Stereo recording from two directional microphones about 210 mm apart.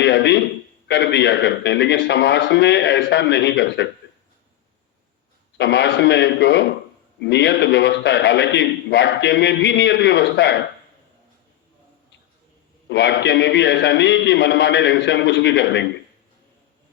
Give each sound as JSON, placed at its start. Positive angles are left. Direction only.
{"t": 0.0, "sound": "a man's voice", "side_deg": 55}
{"t": 5.5, "sound": "a man's voice", "side_deg": 55}
{"t": 12.9, "sound": "a man's voice", "side_deg": 55}